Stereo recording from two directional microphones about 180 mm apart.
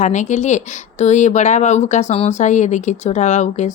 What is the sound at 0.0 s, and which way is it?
Speech, 40° left (ahead or behind).